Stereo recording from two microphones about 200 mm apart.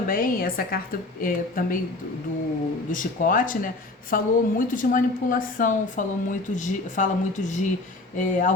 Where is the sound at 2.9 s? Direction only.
40° left (ahead or behind).